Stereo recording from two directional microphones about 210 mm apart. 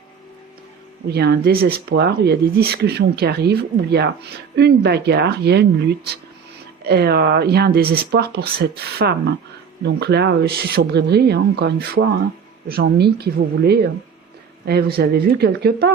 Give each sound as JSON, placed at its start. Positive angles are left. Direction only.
{"t": 1.0, "sound": "speech", "side_deg": -50}
{"t": 6.8, "sound": "speech", "side_deg": -50}